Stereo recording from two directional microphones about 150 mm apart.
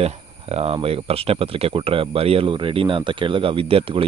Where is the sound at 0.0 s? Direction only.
40° right (ahead or behind).